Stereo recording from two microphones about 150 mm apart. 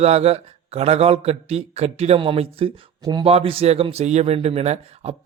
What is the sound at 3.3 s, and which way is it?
A man's voice, 40° right (ahead or behind).